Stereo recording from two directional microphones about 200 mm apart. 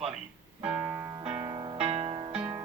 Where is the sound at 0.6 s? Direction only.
5° right (ahead or behind).